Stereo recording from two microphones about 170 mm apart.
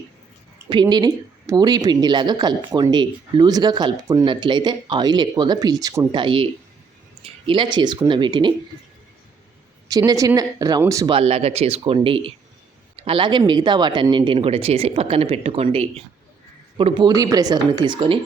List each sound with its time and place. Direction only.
0.7 s speech: 25° right (ahead or behind)
6.1 s speech: 30° right (ahead or behind)
9.9 s speech: 20° right (ahead or behind)
11.1 s speech: 35° right (ahead or behind)